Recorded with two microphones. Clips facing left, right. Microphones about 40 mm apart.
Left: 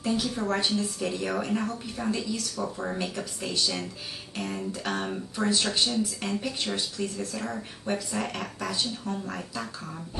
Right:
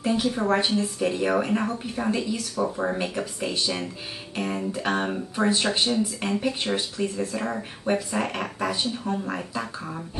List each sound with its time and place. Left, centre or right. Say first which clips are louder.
0.0 s speech: right 4 dB; right